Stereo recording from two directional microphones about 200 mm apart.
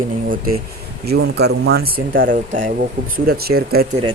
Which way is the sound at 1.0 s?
50° right (ahead or behind).